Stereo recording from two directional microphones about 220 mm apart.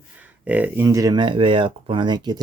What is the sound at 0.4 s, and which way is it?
Speech, 5° right (ahead or behind).